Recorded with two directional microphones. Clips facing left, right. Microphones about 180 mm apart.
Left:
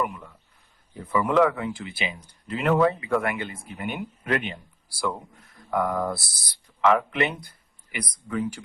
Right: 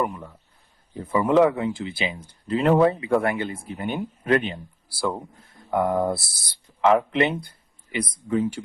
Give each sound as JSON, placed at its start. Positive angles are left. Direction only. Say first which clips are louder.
{"t": 0.0, "sound": "speech", "louder": "right 3 dB", "side_deg": -30}